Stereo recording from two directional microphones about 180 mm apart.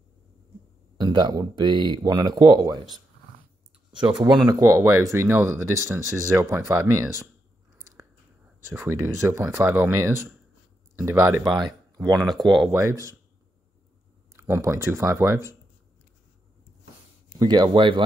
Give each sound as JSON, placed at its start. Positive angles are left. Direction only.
{"t": 0.9, "sound": "speech", "side_deg": -25}
{"t": 4.0, "sound": "speech", "side_deg": -25}
{"t": 8.7, "sound": "speech", "side_deg": -15}
{"t": 12.7, "sound": "speech", "side_deg": -15}
{"t": 14.3, "sound": "speech", "side_deg": -15}
{"t": 17.3, "sound": "speech", "side_deg": -20}